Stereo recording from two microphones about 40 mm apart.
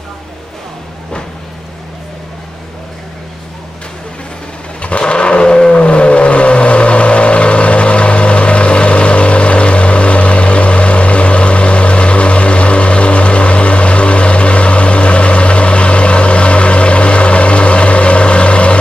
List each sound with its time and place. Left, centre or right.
4.8 s vehicle: left